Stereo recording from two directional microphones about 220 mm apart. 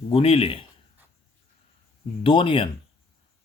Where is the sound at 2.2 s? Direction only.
25° left (ahead or behind).